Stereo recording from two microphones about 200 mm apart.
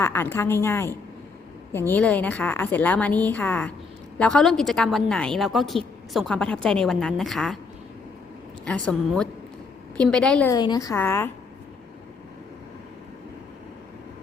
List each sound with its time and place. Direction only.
0.0 s a woman's voice: 10° left (ahead or behind)
8.6 s a woman's voice: 5° left (ahead or behind)
10.5 s a woman's voice: 20° left (ahead or behind)